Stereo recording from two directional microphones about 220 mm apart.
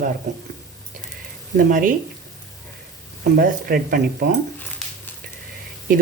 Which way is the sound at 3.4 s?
40° right (ahead or behind).